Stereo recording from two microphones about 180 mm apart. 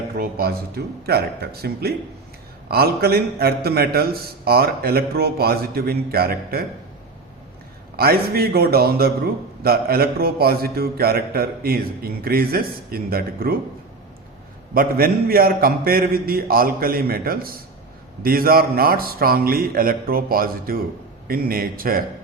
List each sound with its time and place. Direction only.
0.1 s a man's voice: 60° right (ahead or behind)
7.9 s a man's voice: 55° right (ahead or behind)
14.7 s a man's voice: 55° right (ahead or behind)